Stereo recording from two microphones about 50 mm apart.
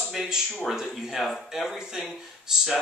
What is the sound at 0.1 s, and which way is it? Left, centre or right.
A man's voice, centre.